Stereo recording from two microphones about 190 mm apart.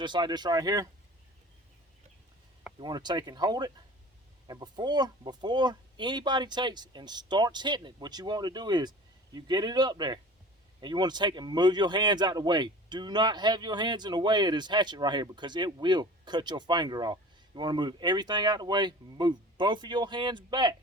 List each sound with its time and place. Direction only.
0.0 s speech: 25° right (ahead or behind)
2.7 s speech: 25° right (ahead or behind)